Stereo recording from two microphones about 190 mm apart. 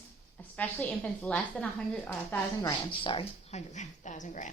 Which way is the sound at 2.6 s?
25° left (ahead or behind).